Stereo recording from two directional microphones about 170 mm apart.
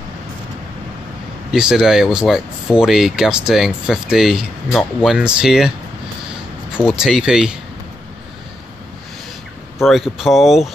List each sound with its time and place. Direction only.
1.5 s speech: 5° right (ahead or behind)
6.8 s speech: centre (ahead or behind)
9.8 s speech: centre (ahead or behind)